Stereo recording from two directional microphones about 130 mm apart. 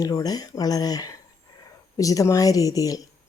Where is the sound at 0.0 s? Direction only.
30° left (ahead or behind).